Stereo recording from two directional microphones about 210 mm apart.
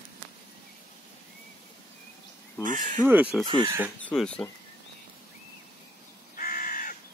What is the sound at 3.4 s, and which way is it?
Speech, 20° right (ahead or behind).